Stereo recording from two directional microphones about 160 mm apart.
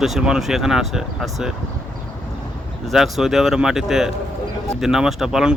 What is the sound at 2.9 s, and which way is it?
Speech, centre (ahead or behind).